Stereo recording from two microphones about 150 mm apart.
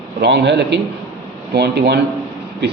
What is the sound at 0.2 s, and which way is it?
A man's voice, 90° right.